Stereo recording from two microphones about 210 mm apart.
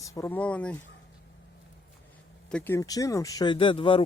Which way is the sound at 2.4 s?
5° left (ahead or behind).